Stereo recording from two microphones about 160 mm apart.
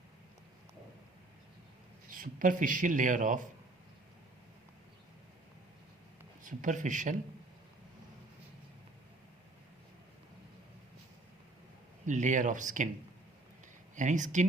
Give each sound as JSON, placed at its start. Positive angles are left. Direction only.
{"t": 2.0, "sound": "speech", "side_deg": -60}
{"t": 6.4, "sound": "speech", "side_deg": -55}
{"t": 12.0, "sound": "speech", "side_deg": -50}
{"t": 13.9, "sound": "speech", "side_deg": -50}